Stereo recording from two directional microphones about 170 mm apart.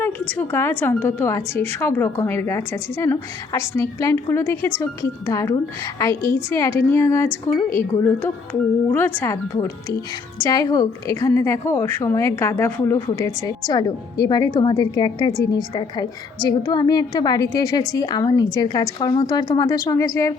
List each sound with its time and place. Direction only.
0.0 s a woman's voice: 10° left (ahead or behind)